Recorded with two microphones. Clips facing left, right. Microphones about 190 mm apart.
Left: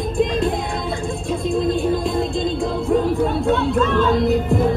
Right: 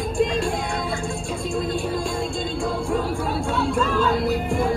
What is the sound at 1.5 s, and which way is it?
Music, centre (ahead or behind).